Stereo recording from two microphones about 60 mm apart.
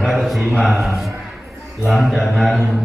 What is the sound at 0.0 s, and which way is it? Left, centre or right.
A man's voice, centre.